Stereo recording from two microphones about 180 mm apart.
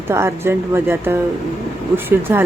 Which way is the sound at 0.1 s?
15° right (ahead or behind).